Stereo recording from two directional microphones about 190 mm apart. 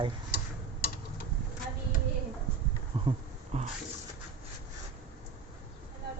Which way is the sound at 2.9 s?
25° right (ahead or behind).